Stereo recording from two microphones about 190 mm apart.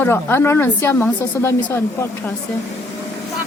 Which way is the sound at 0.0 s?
10° left (ahead or behind).